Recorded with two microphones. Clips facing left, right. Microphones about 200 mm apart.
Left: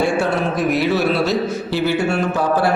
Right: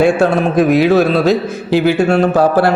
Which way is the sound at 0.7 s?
90° right.